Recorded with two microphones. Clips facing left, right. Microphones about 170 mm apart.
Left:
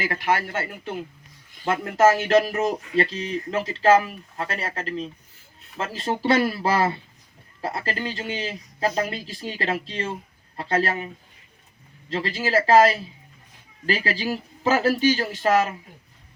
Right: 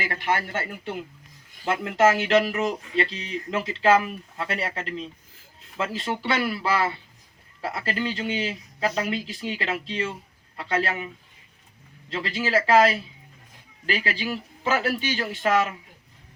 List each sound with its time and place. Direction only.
0.0 s speech: 45° left (ahead or behind)
1.7 s speech: 40° left (ahead or behind)
12.1 s speech: 40° left (ahead or behind)